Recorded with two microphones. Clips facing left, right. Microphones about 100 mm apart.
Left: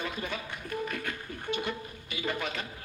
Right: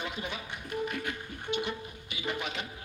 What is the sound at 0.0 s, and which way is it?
Music, 20° right (ahead or behind).